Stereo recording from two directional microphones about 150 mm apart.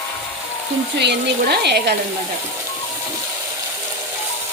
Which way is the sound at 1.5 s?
90° right.